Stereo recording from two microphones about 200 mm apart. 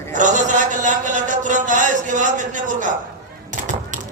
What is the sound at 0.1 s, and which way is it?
A man's voice, 40° right (ahead or behind).